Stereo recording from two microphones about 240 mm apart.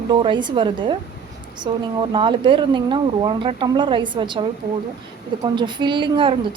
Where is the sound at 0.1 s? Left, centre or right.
Centre.